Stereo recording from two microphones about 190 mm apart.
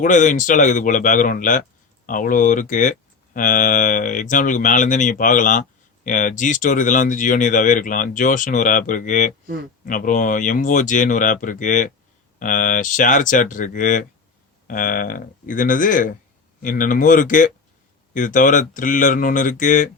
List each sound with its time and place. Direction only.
0.0 s speech: 40° left (ahead or behind)